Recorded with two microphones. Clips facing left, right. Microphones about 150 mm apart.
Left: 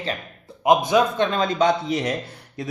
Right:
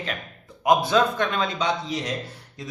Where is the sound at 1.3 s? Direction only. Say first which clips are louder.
Left 6 dB; 40° left (ahead or behind).